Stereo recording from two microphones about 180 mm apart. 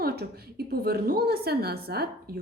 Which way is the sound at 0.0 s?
60° right (ahead or behind).